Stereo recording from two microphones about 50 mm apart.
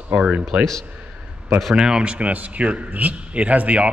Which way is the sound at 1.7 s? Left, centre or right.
Centre.